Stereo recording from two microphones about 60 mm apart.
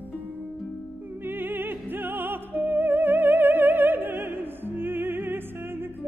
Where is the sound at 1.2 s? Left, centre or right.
Right.